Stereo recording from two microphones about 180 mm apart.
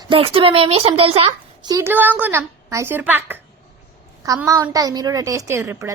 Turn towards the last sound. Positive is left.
turn(degrees=-15)  # may be behind; listen again after turning